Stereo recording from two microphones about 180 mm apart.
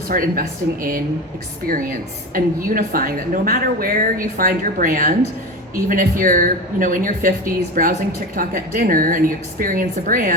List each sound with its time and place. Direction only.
0.1 s a woman's voice: 50° right (ahead or behind)